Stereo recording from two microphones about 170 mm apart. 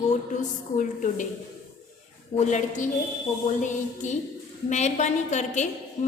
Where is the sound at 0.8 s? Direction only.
45° left (ahead or behind).